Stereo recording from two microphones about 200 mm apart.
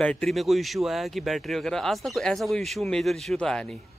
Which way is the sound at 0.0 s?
5° left (ahead or behind).